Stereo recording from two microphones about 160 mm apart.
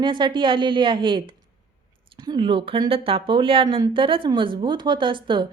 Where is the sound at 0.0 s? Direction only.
30° right (ahead or behind).